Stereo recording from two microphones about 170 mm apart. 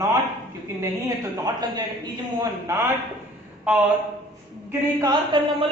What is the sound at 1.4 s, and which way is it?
A woman's voice, 25° right (ahead or behind).